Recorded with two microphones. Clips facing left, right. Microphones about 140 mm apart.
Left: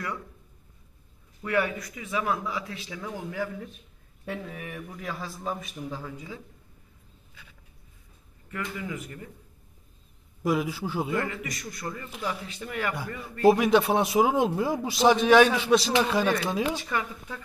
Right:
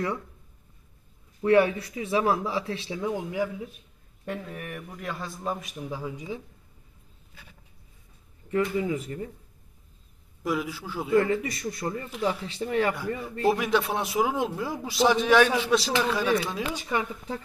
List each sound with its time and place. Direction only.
1.4 s a man's voice: 30° right (ahead or behind); by 3.7 s 10° right (ahead or behind)
4.3 s a man's voice: 5° left (ahead or behind)
5.9 s speech: 10° right (ahead or behind)
8.5 s a man's voice: 25° right (ahead or behind)
10.4 s a man's voice: 20° left (ahead or behind)
11.2 s a man's voice: 30° right (ahead or behind)
13.5 s a man's voice: 15° left (ahead or behind)
16.9 s speech: 15° right (ahead or behind)